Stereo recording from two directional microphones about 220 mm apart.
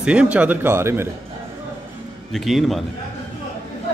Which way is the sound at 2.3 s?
Centre (ahead or behind).